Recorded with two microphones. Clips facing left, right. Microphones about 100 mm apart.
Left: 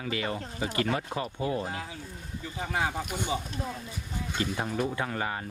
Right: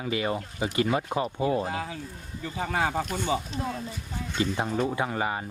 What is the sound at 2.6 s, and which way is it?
Speech, 65° right (ahead or behind).